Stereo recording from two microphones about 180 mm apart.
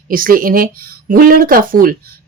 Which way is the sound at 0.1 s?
50° right (ahead or behind).